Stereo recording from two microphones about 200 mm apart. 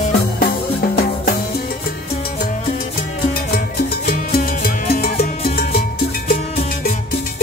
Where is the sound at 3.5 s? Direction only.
50° left (ahead or behind).